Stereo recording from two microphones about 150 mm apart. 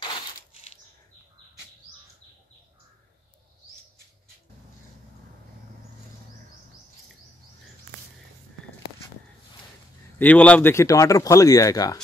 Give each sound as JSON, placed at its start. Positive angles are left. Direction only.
{"t": 10.1, "sound": "speech", "side_deg": 10}